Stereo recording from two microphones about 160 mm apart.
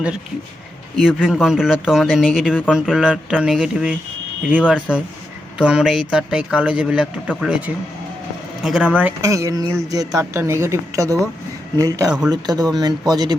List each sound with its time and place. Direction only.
0.9 s speech: centre (ahead or behind)
9.2 s speech: 20° right (ahead or behind)